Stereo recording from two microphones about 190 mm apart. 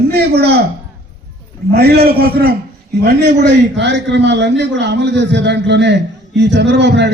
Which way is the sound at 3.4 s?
65° right (ahead or behind).